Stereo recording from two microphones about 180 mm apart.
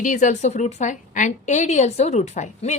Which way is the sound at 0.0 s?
45° left (ahead or behind).